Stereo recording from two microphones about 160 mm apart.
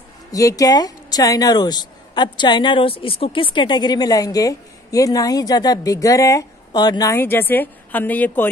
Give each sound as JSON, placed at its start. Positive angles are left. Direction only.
{"t": 0.3, "sound": "speech", "side_deg": 20}